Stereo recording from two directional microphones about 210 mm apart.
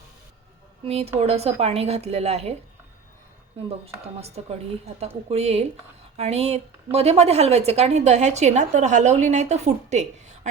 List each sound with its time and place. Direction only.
0.9 s speech: 30° right (ahead or behind)
3.7 s a woman's voice: 30° right (ahead or behind)